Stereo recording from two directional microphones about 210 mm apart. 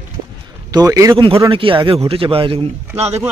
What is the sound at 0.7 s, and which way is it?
A man's voice, 15° right (ahead or behind).